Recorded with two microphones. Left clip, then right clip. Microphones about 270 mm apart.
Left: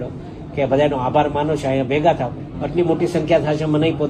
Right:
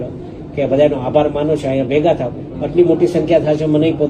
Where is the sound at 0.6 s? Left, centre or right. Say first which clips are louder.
Right 3 dB; left.